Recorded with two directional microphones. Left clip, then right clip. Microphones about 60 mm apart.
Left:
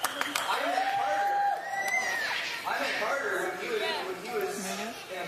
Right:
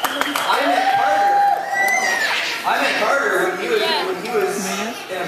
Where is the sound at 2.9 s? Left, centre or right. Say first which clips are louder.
Right 12 dB; left.